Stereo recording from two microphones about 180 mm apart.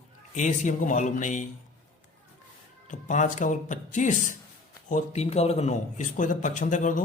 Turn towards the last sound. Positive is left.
turn(degrees=45)  # may be behind; listen again after turning